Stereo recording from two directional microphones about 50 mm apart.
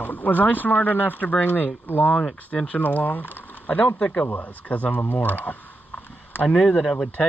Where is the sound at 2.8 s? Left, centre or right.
Left.